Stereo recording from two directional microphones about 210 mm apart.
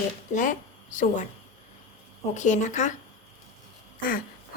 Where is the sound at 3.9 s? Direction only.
40° left (ahead or behind).